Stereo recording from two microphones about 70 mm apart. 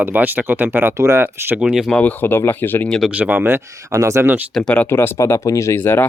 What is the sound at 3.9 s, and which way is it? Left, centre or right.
Speech, right.